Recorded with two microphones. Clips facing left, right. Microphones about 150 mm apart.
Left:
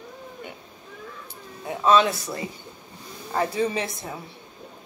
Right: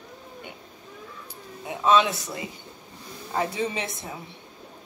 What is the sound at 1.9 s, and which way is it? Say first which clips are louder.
Speech: left 2 dB; 20° right (ahead or behind).